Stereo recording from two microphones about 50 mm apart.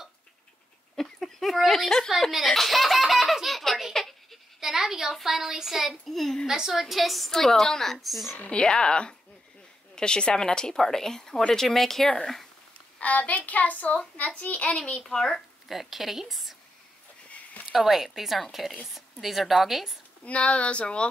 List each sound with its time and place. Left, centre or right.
0.9 s a sound: centre
2.3 s laughter: centre
4.6 s speech: centre
6.4 s a woman's voice: centre
8.5 s a child's voice: centre
13.0 s a child's voice: left
15.0 s a woman's voice: centre
15.7 s a woman's voice: centre
17.7 s a woman's voice: centre
20.2 s a child's voice: left